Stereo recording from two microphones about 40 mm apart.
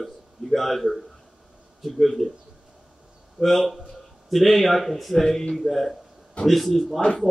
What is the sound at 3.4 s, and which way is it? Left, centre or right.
A man's voice, centre.